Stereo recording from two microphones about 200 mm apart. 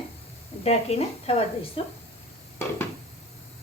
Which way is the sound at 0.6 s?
30° left (ahead or behind).